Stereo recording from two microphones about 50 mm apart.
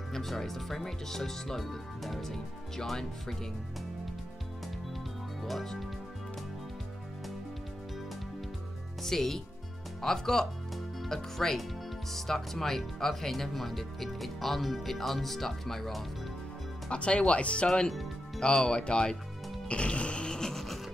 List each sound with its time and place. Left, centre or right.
0.1 s speech: centre
5.4 s speech: centre
9.0 s speech: centre
16.9 s speech: left
19.7 s music: left; by 20.8 s centre